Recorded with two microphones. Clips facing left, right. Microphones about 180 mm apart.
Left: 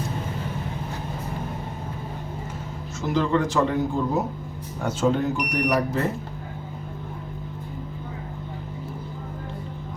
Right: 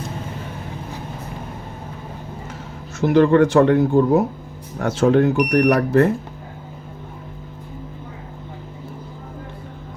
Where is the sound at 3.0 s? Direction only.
65° right (ahead or behind).